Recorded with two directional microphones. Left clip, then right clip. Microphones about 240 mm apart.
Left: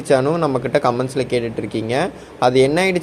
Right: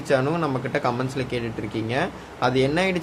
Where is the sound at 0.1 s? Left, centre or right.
Centre.